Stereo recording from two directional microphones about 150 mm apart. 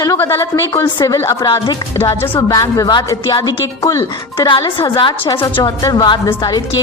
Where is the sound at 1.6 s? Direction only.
20° left (ahead or behind).